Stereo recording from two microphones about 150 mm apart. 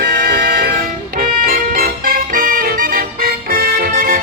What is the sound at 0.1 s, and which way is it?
Music, 75° right (ahead or behind).